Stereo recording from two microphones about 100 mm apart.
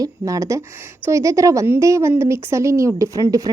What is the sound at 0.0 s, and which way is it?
A woman's voice, 35° right (ahead or behind).